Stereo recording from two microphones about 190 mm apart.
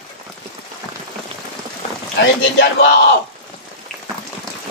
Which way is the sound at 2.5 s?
60° left (ahead or behind).